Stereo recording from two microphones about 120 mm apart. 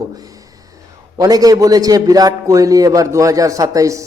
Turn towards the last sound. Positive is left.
turn(degrees=-25)  # may be behind; listen again after turning